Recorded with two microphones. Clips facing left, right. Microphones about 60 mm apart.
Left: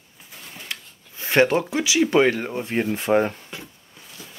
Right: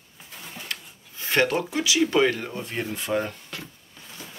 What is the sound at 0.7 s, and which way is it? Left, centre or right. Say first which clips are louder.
Speech: left 1 dB; left.